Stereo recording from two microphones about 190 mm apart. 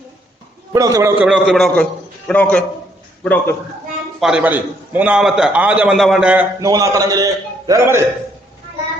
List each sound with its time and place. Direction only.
0.7 s a man's voice: 15° right (ahead or behind)
1.3 s a man's voice: centre (ahead or behind)
4.2 s a man's voice: 5° right (ahead or behind)